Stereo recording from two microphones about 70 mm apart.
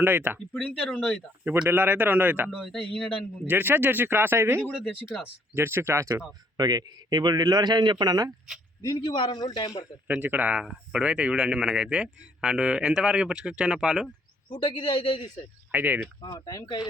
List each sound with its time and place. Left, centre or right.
0.0 s speech: right
0.5 s speech: centre
1.7 s speech: right
2.5 s a man's voice: centre
3.4 s speech: right
6.6 s a man's voice: right
8.8 s a man's voice: left
10.2 s speech: right
10.6 s speech: centre
14.5 s a man's voice: left
15.7 s speech: right